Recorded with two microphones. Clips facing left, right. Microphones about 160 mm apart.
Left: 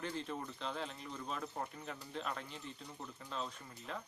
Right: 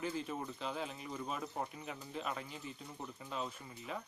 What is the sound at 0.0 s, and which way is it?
Speech, 5° right (ahead or behind).